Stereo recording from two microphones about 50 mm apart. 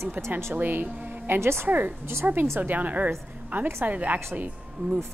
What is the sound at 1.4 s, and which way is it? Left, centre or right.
Speech, right.